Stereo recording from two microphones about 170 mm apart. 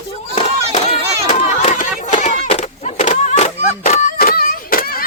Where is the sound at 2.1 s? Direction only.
45° left (ahead or behind).